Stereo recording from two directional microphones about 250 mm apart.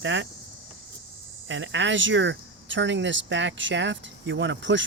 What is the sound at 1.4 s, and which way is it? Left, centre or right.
Speech, right.